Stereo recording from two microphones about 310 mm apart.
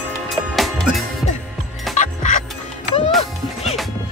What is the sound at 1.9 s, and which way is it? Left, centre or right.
Music, left.